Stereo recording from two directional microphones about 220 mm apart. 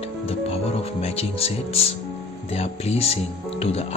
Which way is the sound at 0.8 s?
25° left (ahead or behind).